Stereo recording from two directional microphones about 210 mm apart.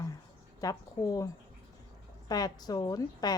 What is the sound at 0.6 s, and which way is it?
Speech, 15° left (ahead or behind).